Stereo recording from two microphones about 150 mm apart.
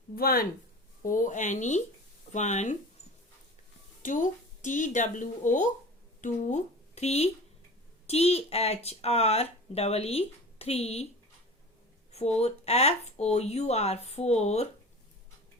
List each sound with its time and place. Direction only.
0.2 s speech: 80° left
1.0 s speech: 60° left (ahead or behind)
4.0 s speech: 60° left (ahead or behind); by 11.0 s 45° left (ahead or behind)
12.4 s speech: 45° left (ahead or behind)